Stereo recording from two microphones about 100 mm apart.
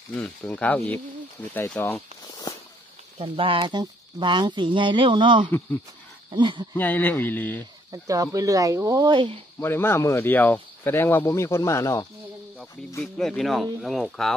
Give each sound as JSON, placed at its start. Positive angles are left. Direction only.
{"t": 0.1, "sound": "speech", "side_deg": 15}
{"t": 1.8, "sound": "speech", "side_deg": 25}
{"t": 2.2, "sound": "a sound", "side_deg": 40}
{"t": 3.2, "sound": "speech", "side_deg": -60}
{"t": 6.7, "sound": "speech", "side_deg": 20}
{"t": 7.9, "sound": "speech", "side_deg": -35}
{"t": 9.1, "sound": "speech", "side_deg": -55}
{"t": 9.6, "sound": "speech", "side_deg": 25}
{"t": 13.0, "sound": "speech", "side_deg": 5}